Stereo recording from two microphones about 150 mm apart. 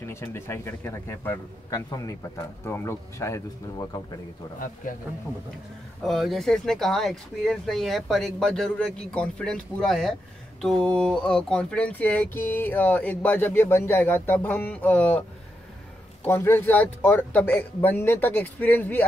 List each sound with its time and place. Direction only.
0.0 s speech: 15° left (ahead or behind)
6.0 s speech: centre (ahead or behind)
16.3 s speech: 15° left (ahead or behind)